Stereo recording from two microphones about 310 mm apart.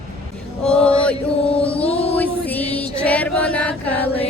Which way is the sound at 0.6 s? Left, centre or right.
Centre.